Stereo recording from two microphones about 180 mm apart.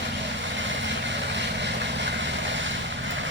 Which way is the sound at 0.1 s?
90° right.